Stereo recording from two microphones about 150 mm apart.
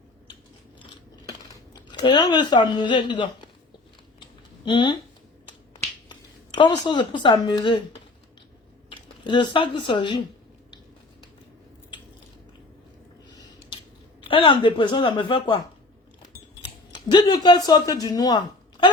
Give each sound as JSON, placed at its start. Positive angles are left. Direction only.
{"t": 1.9, "sound": "speech", "side_deg": 30}
{"t": 4.6, "sound": "speech", "side_deg": 30}
{"t": 6.6, "sound": "speech", "side_deg": 30}
{"t": 8.9, "sound": "speech", "side_deg": 35}
{"t": 13.3, "sound": "a sound", "side_deg": 25}
{"t": 14.3, "sound": "speech", "side_deg": 35}
{"t": 16.6, "sound": "speech", "side_deg": 30}